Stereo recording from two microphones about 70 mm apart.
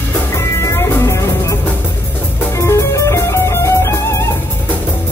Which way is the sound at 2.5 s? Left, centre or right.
Left.